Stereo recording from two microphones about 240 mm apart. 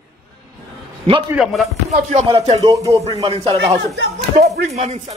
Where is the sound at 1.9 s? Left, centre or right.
Right.